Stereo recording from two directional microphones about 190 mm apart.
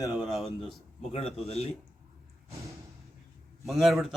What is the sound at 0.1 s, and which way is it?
Speech, centre (ahead or behind).